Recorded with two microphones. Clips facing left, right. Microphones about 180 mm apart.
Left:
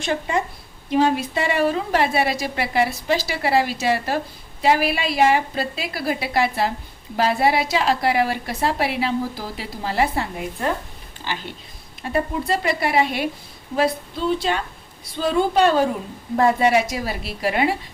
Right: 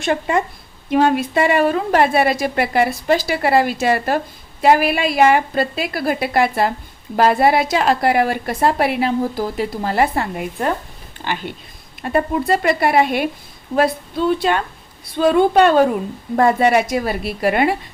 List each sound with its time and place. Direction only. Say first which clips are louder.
0.0 s a woman's voice: right 4 dB; 55° right (ahead or behind)